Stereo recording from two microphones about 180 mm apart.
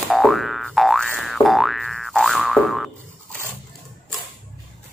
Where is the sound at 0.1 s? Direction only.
Centre (ahead or behind).